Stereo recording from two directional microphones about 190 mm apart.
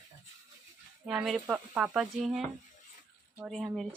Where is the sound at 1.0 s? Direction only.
Centre (ahead or behind).